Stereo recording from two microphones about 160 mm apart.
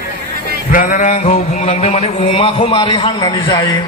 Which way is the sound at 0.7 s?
55° left (ahead or behind).